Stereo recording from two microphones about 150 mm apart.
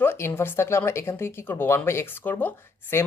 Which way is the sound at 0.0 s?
15° left (ahead or behind).